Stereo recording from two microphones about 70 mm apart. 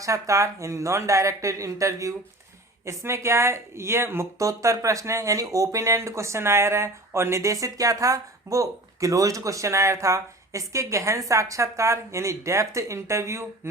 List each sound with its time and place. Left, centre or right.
0.0 s speech: right